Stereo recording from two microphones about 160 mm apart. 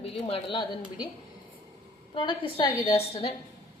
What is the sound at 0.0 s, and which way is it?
Speech, 35° left (ahead or behind).